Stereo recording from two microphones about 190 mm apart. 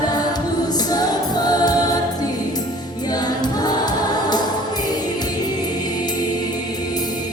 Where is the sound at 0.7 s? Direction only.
20° left (ahead or behind).